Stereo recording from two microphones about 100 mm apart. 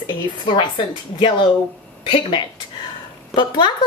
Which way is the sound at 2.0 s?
55° left (ahead or behind).